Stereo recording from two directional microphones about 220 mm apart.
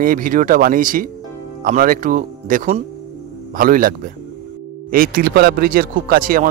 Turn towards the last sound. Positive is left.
turn(degrees=-40)  # may be behind; listen again after turning